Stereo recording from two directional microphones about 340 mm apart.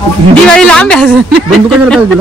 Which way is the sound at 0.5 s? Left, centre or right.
Centre.